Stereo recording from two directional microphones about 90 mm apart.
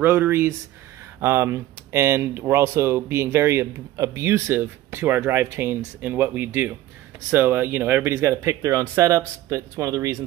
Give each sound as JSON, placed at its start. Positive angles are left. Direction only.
{"t": 0.0, "sound": "speech", "side_deg": -20}